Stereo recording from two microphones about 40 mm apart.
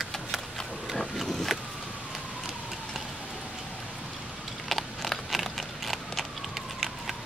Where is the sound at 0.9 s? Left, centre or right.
Centre.